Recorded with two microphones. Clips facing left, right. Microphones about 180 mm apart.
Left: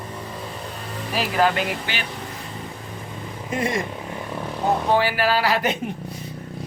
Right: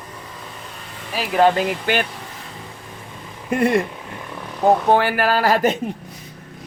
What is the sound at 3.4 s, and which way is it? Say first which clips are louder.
Speech: right 7 dB; 60° right (ahead or behind).